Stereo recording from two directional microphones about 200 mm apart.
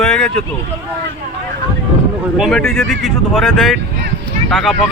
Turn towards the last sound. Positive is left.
turn(degrees=0)  # may be behind; listen again after turning